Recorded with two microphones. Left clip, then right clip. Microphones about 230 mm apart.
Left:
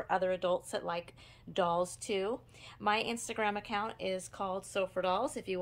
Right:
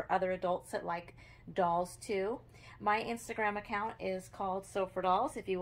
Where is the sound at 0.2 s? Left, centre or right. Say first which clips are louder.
Left 2 dB; centre.